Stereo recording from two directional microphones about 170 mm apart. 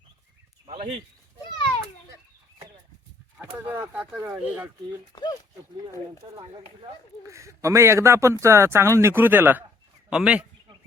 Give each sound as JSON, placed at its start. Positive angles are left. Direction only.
{"t": 0.7, "sound": "a sound", "side_deg": -35}
{"t": 3.7, "sound": "speech", "side_deg": -10}
{"t": 5.1, "sound": "speech", "side_deg": 25}
{"t": 6.3, "sound": "speech", "side_deg": -35}
{"t": 7.3, "sound": "speech", "side_deg": -15}